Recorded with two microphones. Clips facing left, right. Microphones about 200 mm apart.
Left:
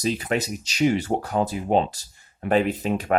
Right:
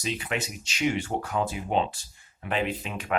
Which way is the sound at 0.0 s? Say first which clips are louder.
Left 7 dB; 40° left (ahead or behind).